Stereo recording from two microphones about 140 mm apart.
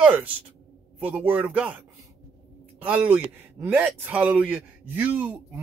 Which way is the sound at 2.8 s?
10° right (ahead or behind).